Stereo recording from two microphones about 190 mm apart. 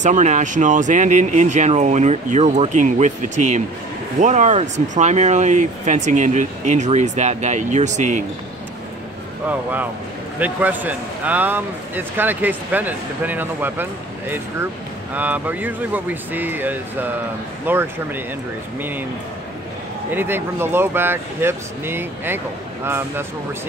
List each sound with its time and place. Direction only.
0.0 s speech: 40° right (ahead or behind)
9.5 s speech: 10° right (ahead or behind)
15.1 s speech: 10° right (ahead or behind)
20.1 s speech: 10° right (ahead or behind)